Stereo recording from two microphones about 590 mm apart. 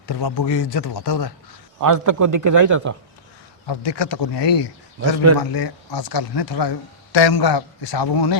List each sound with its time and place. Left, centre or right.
0.1 s speech: left
1.8 s a man's voice: right
3.7 s speech: left
4.9 s a man's voice: right
5.4 s speech: left